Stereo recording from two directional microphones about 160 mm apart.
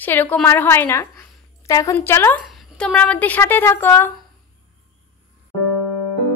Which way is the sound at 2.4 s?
Centre (ahead or behind).